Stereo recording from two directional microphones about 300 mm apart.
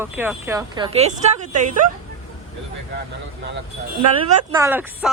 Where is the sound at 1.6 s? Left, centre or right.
Right.